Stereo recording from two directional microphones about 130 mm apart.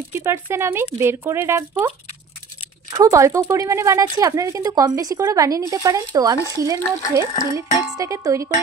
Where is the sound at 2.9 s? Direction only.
25° right (ahead or behind).